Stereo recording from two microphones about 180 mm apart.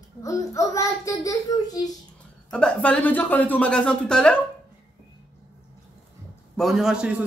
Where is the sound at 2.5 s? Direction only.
5° left (ahead or behind).